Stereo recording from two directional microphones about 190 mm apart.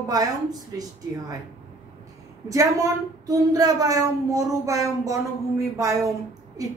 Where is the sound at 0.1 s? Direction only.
20° right (ahead or behind).